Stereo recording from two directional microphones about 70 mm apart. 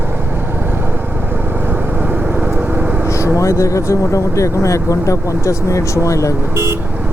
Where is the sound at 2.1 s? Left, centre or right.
Right.